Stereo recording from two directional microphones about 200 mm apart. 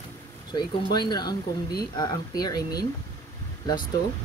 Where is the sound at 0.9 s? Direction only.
20° left (ahead or behind).